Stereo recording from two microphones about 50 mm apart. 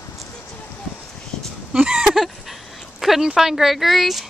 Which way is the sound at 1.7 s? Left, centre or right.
Centre.